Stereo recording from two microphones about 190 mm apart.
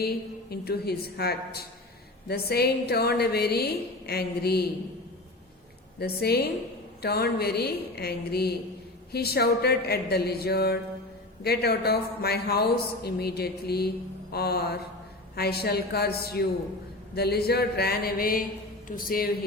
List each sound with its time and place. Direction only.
0.5 s a man's voice: 55° left (ahead or behind)
6.0 s a man's voice: 55° left (ahead or behind)